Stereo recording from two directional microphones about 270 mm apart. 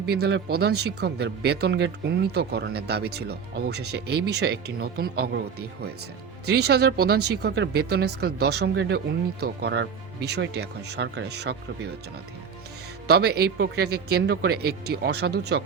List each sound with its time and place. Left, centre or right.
0.1 s speech: right
13.1 s speech: right